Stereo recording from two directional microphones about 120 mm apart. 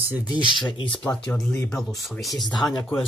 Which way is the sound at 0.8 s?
45° left (ahead or behind).